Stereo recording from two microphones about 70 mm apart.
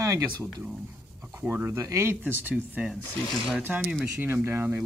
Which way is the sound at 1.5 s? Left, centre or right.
Right.